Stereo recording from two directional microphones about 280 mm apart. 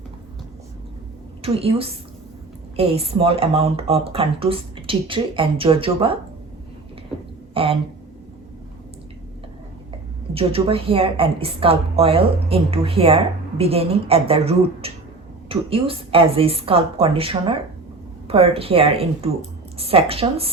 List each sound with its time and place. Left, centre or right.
1.4 s a woman's voice: right
7.5 s speech: centre
10.3 s a woman's voice: centre